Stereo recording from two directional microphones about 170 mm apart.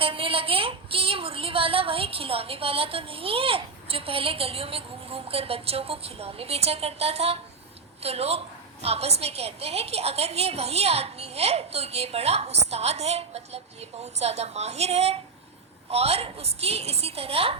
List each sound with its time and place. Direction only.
0.0 s a woman's voice: 30° right (ahead or behind)